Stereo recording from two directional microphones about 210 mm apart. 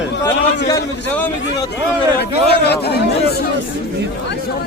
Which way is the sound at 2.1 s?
50° left (ahead or behind).